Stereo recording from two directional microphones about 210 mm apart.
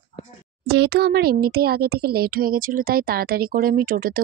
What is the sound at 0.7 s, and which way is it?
Speech, 50° right (ahead or behind).